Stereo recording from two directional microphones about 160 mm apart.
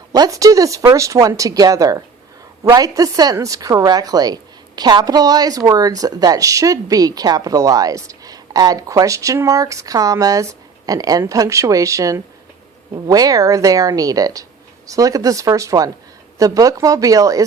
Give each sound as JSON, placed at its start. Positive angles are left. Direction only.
{"t": 0.1, "sound": "a woman's voice", "side_deg": -20}